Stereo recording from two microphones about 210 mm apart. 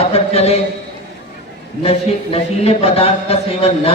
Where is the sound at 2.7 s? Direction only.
30° left (ahead or behind).